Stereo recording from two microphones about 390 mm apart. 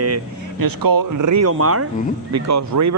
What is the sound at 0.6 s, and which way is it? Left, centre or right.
Speech, right.